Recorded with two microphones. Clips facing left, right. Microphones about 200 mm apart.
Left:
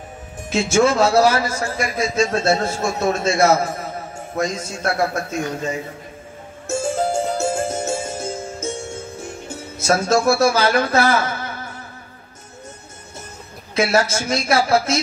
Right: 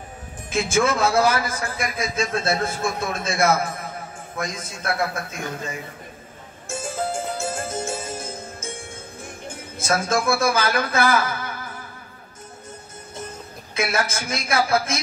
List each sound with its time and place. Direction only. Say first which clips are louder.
0.6 s a man's voice: left 5 dB; 30° left (ahead or behind)
6.7 s music: left 7 dB; 25° left (ahead or behind)
8.6 s music: left 8 dB; 45° left (ahead or behind)
9.8 s a man's voice: left 5 dB; 25° left (ahead or behind)
13.7 s a man's voice: left 6 dB; 30° left (ahead or behind)